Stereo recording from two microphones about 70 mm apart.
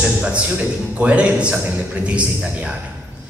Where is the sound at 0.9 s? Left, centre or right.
Centre.